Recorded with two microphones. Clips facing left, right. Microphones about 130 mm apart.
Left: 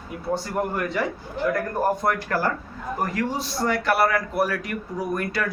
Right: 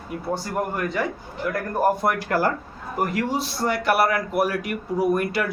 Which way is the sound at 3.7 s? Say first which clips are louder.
Right 1 dB; 10° right (ahead or behind).